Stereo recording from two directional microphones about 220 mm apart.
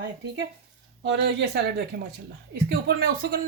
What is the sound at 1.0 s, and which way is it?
Speech, 50° right (ahead or behind).